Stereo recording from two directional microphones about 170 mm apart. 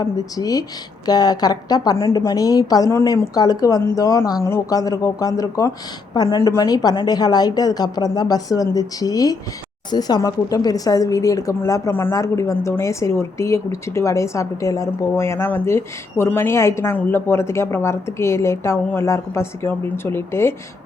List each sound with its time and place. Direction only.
0.0 s a woman's voice: 20° left (ahead or behind)